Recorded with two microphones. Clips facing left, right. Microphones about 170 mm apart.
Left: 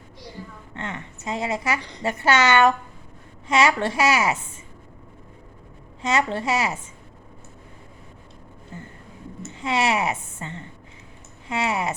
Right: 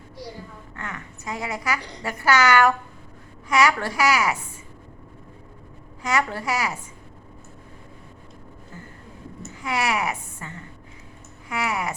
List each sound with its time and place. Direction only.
0.7 s a woman's voice: 25° left (ahead or behind)
6.0 s a woman's voice: 25° left (ahead or behind)
9.5 s a woman's voice: 25° left (ahead or behind)